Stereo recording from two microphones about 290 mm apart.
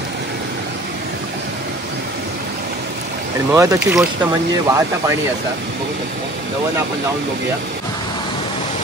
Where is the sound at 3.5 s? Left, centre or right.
Centre.